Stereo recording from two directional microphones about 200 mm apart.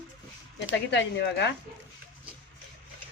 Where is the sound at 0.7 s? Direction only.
60° left (ahead or behind).